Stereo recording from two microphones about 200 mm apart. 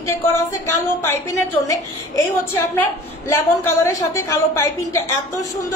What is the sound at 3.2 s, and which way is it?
A woman's voice, 15° left (ahead or behind).